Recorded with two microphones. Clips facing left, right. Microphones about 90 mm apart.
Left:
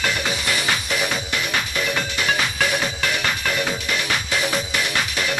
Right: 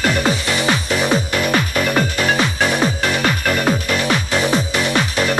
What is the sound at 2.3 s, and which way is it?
Music, 35° right (ahead or behind).